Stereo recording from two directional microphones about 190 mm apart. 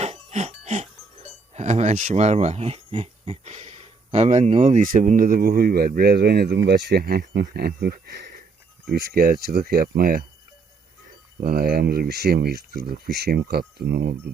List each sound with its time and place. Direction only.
0.0 s speech: 35° right (ahead or behind)
11.3 s speech: 50° right (ahead or behind)